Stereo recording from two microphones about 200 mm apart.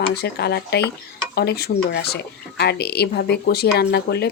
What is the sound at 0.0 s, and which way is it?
A woman's voice, 55° left (ahead or behind).